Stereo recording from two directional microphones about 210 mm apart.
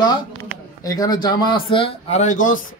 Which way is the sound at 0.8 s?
15° left (ahead or behind).